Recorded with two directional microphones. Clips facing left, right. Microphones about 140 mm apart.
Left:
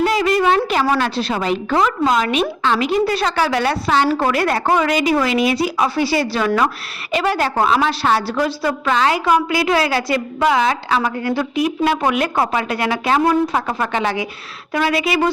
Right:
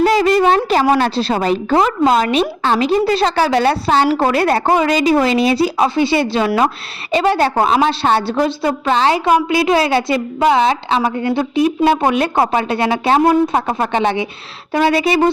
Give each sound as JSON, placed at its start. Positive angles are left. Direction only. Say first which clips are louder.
{"t": 0.0, "sound": "a woman's voice", "louder": "right 4 dB", "side_deg": -35}